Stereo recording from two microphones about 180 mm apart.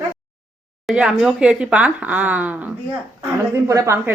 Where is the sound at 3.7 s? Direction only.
15° right (ahead or behind).